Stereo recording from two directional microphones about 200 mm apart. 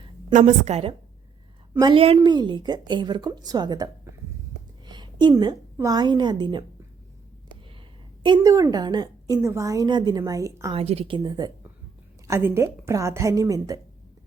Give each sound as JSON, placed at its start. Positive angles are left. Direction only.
{"t": 0.3, "sound": "a woman's voice", "side_deg": -35}
{"t": 4.9, "sound": "a woman's voice", "side_deg": -20}
{"t": 8.2, "sound": "a woman's voice", "side_deg": -20}
{"t": 10.8, "sound": "a woman's voice", "side_deg": -30}